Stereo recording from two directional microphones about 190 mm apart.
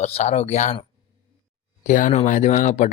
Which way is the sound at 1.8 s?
40° left (ahead or behind).